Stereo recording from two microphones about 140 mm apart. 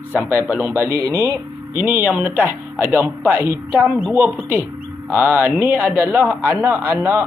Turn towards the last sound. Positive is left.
turn(degrees=-15)  # may be behind; listen again after turning